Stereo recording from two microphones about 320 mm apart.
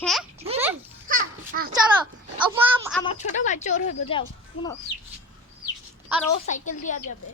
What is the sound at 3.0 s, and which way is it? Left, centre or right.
Speech, centre.